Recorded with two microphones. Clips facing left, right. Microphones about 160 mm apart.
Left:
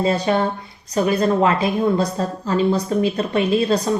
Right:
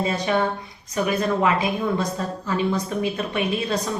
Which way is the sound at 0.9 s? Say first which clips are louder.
Left 5 dB; 35° left (ahead or behind).